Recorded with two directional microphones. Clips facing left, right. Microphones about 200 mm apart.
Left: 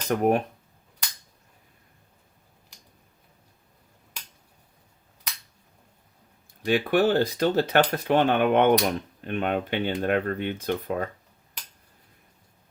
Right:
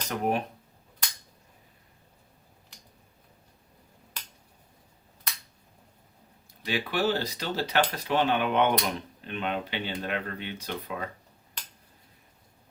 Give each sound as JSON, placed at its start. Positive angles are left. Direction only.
{"t": 0.1, "sound": "speech", "side_deg": 50}
{"t": 6.7, "sound": "speech", "side_deg": 50}